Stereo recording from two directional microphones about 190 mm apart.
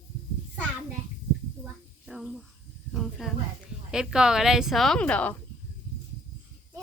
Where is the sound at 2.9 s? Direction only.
Centre (ahead or behind).